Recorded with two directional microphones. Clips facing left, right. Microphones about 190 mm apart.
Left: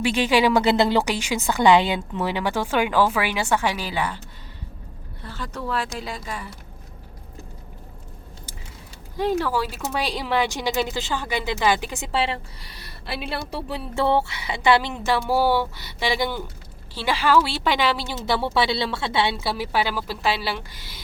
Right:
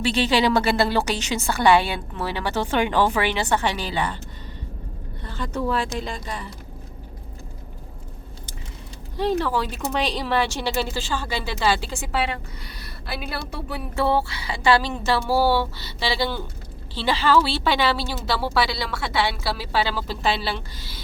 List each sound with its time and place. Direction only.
0.0 s a woman's voice: 10° left (ahead or behind)
5.2 s a woman's voice: 5° left (ahead or behind)
9.1 s a woman's voice: 10° left (ahead or behind)